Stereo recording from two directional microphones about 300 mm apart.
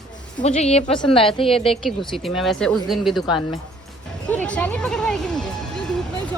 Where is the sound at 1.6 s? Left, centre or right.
Centre.